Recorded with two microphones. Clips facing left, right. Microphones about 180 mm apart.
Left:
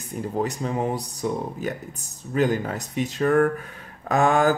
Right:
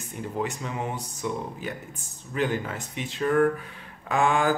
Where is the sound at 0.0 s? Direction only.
35° left (ahead or behind).